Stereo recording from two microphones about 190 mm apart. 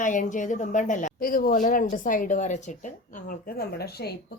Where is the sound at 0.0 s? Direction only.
45° left (ahead or behind).